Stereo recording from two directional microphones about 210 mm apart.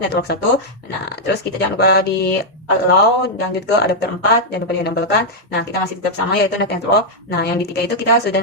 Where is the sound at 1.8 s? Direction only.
50° left (ahead or behind).